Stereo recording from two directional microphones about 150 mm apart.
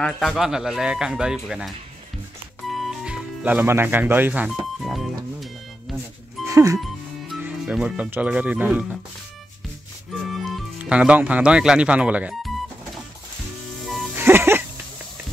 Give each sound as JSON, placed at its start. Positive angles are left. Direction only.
{"t": 0.0, "sound": "speech", "side_deg": 5}
{"t": 2.7, "sound": "music", "side_deg": 0}
{"t": 6.4, "sound": "music", "side_deg": -20}
{"t": 7.3, "sound": "speech", "side_deg": -10}
{"t": 10.2, "sound": "music", "side_deg": 0}
{"t": 10.8, "sound": "speech", "side_deg": -10}
{"t": 14.1, "sound": "music", "side_deg": -15}